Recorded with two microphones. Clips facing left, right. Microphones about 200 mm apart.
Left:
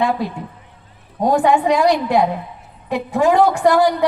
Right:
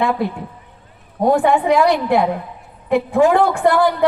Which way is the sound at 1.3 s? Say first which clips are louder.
Right 1 dB; 55° right (ahead or behind).